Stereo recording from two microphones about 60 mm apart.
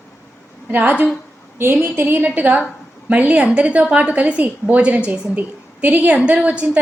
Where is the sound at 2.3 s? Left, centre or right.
Right.